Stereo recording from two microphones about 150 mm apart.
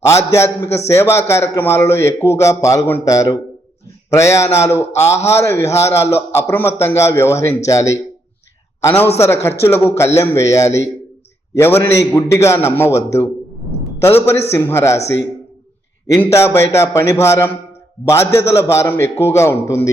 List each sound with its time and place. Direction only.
0.0 s a man's voice: 20° left (ahead or behind)
16.2 s a man's voice: 15° left (ahead or behind)